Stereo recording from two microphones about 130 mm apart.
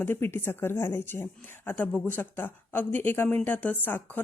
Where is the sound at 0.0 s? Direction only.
20° left (ahead or behind).